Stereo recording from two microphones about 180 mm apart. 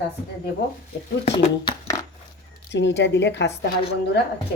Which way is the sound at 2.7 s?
75° left (ahead or behind).